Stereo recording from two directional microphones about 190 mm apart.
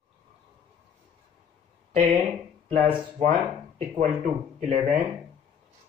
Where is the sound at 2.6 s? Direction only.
40° right (ahead or behind).